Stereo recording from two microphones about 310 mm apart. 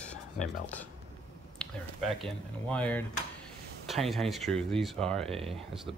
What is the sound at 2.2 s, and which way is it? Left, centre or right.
Speech, centre.